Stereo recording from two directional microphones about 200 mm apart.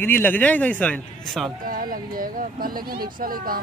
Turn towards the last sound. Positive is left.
turn(degrees=-45)  # may be behind; listen again after turning